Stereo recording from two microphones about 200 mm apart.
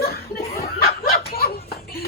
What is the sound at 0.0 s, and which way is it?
Chuckle, 55° left (ahead or behind).